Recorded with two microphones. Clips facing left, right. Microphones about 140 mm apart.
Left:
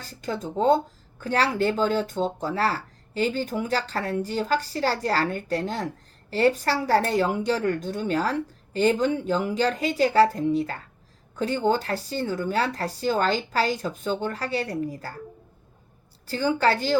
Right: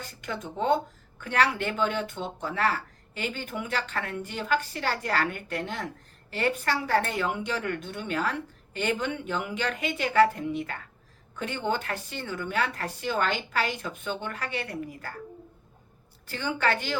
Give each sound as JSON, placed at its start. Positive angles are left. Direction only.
{"t": 0.0, "sound": "speech", "side_deg": 35}
{"t": 16.2, "sound": "speech", "side_deg": 35}